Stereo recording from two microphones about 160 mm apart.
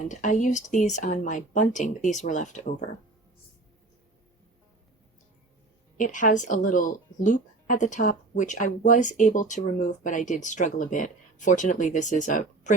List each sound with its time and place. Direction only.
0.1 s speech: 50° left (ahead or behind)
6.0 s speech: 55° left (ahead or behind)